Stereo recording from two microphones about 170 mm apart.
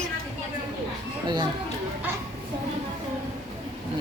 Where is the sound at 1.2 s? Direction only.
25° right (ahead or behind).